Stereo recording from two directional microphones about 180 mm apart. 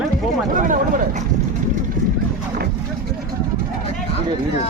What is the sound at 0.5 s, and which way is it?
Speech, 45° right (ahead or behind).